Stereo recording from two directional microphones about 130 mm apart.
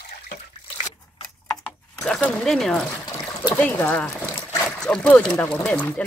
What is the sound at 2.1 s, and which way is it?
Speech, 5° left (ahead or behind).